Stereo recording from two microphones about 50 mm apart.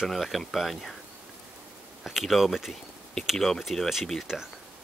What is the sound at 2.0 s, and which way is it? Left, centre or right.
Speech, centre.